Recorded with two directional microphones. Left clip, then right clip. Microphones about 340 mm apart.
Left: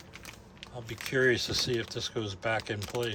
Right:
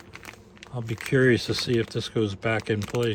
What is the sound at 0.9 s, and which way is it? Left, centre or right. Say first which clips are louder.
Speech: right 5 dB; centre.